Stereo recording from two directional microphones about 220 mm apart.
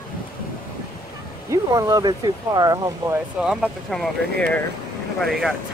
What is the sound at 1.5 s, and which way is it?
Speech, 15° right (ahead or behind).